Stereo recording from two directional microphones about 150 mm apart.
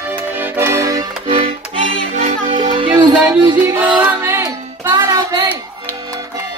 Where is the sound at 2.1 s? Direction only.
40° right (ahead or behind).